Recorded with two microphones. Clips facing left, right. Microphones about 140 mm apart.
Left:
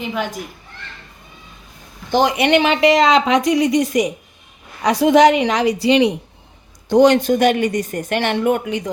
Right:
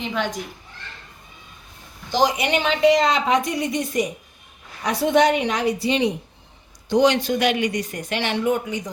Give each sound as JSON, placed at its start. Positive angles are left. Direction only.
{"t": 0.0, "sound": "a child's voice", "side_deg": 5}
{"t": 2.0, "sound": "a woman's voice", "side_deg": 60}
{"t": 6.8, "sound": "speech", "side_deg": 50}